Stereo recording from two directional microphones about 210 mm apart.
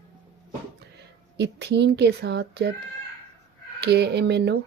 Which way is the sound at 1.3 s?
55° right (ahead or behind).